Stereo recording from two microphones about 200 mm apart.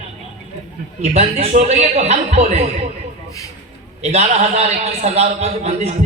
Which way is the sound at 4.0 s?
35° right (ahead or behind).